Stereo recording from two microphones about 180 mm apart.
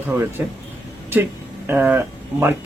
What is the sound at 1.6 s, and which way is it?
Speech, 10° right (ahead or behind).